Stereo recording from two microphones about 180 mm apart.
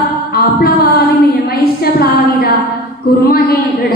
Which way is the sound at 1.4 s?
60° left (ahead or behind).